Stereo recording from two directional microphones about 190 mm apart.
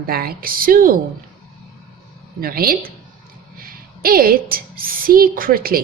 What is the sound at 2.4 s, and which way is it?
A woman's voice, 50° right (ahead or behind).